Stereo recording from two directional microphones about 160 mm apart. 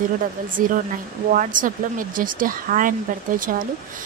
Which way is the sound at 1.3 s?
55° right (ahead or behind).